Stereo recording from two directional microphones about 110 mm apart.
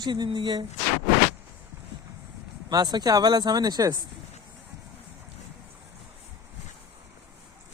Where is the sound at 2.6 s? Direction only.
40° right (ahead or behind).